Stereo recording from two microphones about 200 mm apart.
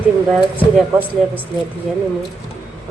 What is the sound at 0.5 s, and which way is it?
Speech, 10° right (ahead or behind).